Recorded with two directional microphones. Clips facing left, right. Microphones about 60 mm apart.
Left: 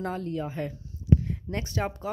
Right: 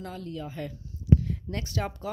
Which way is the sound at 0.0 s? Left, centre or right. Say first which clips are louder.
Left 6 dB; left.